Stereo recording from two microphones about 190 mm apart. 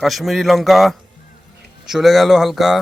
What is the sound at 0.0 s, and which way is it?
Speech, centre (ahead or behind).